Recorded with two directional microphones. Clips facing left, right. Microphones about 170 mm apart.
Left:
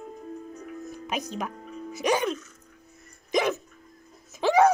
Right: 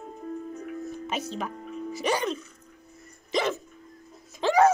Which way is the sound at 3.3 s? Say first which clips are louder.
Left 2 dB; 10° left (ahead or behind).